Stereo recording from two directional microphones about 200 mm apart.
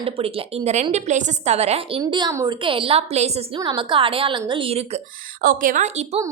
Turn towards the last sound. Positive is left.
turn(degrees=-35)  # may be behind; listen again after turning